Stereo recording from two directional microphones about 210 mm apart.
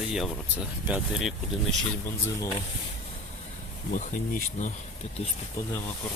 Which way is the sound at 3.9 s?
40° left (ahead or behind).